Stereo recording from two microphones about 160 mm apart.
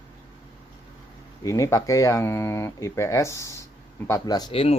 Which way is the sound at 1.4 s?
20° left (ahead or behind).